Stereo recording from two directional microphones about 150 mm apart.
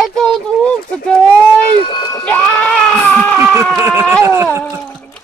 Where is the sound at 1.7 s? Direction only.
35° left (ahead or behind).